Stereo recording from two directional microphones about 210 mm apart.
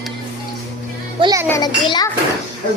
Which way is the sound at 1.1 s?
20° right (ahead or behind).